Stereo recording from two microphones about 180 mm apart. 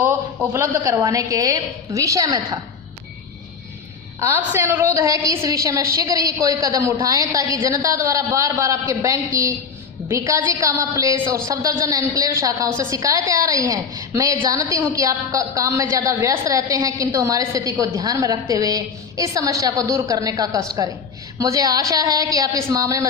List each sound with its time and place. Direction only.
0.0 s a woman's voice: 10° right (ahead or behind)
4.2 s a woman's voice: 15° right (ahead or behind)